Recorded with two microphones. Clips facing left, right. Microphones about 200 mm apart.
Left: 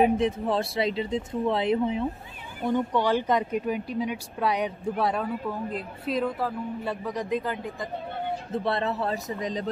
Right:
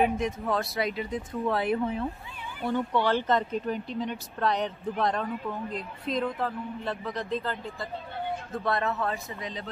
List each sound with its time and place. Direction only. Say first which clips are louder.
0.0 s speech: left 4 dB; 30° left (ahead or behind); by 7.9 s 15° left (ahead or behind)
8.5 s speech: left 2 dB; 30° left (ahead or behind)